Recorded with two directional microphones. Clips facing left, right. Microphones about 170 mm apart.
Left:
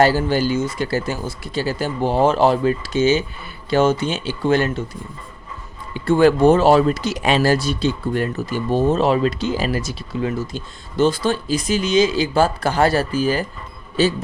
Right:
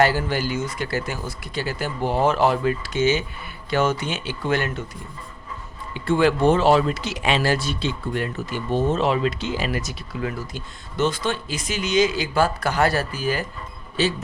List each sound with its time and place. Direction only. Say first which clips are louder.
0.0 s speech: left 4 dB; 30° left (ahead or behind)
5.9 s speech: left 5 dB; 40° left (ahead or behind)